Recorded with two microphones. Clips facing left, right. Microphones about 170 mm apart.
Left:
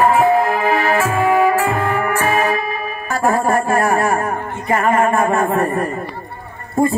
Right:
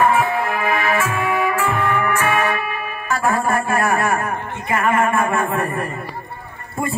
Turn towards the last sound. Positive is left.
turn(degrees=40)  # may be behind; listen again after turning